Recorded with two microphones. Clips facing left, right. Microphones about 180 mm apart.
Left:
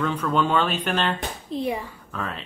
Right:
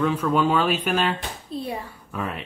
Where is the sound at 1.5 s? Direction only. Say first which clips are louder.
Left 4 dB; 15° left (ahead or behind).